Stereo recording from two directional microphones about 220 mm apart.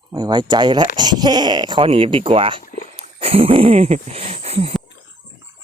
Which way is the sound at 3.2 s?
25° right (ahead or behind).